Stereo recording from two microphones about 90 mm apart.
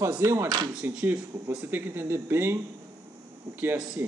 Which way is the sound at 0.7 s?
10° right (ahead or behind).